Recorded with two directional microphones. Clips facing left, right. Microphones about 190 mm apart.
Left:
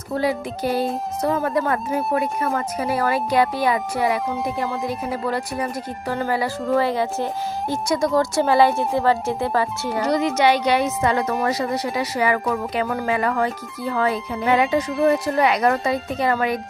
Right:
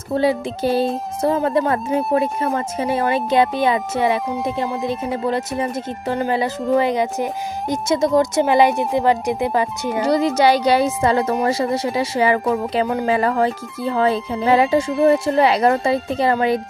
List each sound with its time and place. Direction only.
0.1 s speech: 25° right (ahead or behind)
10.0 s speech: 30° right (ahead or behind)
13.0 s speech: 30° right (ahead or behind)